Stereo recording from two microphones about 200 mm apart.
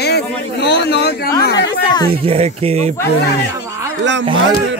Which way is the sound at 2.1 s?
30° right (ahead or behind).